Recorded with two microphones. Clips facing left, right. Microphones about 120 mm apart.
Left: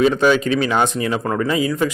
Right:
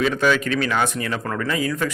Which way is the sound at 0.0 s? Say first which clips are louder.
Left 5 dB; 25° left (ahead or behind).